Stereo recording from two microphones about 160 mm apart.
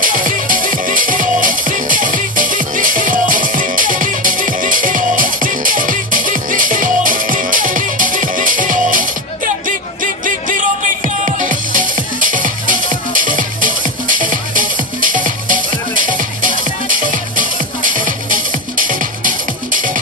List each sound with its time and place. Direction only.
0.0 s music: 60° right (ahead or behind)
10.2 s music: 55° right (ahead or behind)